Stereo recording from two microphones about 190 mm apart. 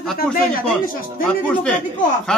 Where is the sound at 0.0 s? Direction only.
Centre (ahead or behind).